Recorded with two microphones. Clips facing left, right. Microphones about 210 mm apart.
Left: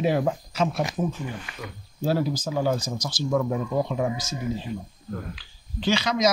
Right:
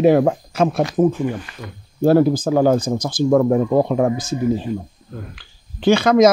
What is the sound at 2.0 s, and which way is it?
Speech, 55° right (ahead or behind).